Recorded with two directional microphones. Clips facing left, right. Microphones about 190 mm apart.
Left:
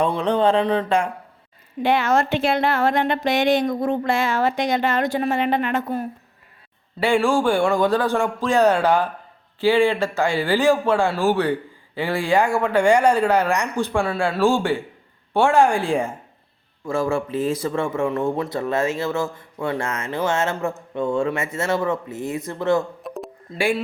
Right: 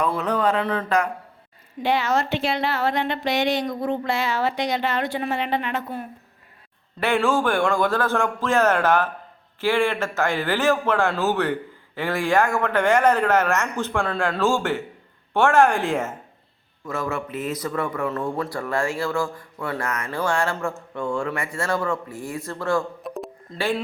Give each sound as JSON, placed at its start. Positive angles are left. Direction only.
{"t": 0.1, "sound": "speech", "side_deg": 30}
{"t": 1.8, "sound": "a woman's voice", "side_deg": 55}
{"t": 7.0, "sound": "speech", "side_deg": 15}
{"t": 16.8, "sound": "speech", "side_deg": 30}
{"t": 23.0, "sound": "a sound", "side_deg": 0}
{"t": 23.6, "sound": "speech", "side_deg": 10}